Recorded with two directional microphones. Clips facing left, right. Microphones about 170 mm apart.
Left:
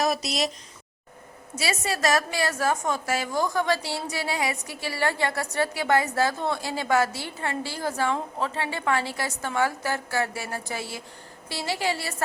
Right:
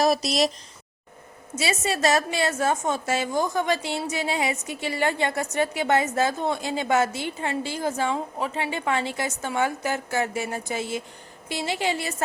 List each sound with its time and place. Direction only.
0.0 s speech: 35° right (ahead or behind)
1.5 s a woman's voice: 25° right (ahead or behind)